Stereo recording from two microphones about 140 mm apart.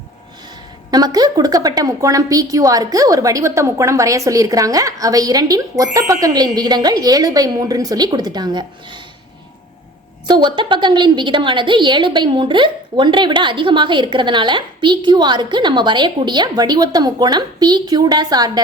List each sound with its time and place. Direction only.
0.9 s a woman's voice: 30° right (ahead or behind)
10.2 s a woman's voice: 35° right (ahead or behind)